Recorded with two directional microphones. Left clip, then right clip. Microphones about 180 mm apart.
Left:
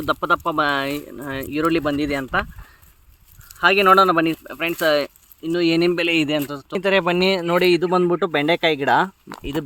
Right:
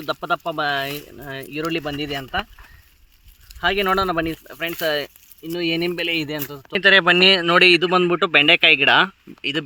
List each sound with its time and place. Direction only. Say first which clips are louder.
0.0 s speech: left 4 dB; 60° left (ahead or behind)
3.6 s speech: left 6 dB; 65° left (ahead or behind)
6.7 s speech: right 5 dB; 15° left (ahead or behind)